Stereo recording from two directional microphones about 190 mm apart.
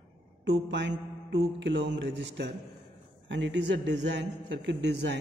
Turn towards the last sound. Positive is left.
turn(degrees=-65)  # may be behind; listen again after turning